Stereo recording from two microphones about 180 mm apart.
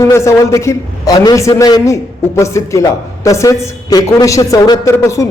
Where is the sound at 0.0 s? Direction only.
15° left (ahead or behind).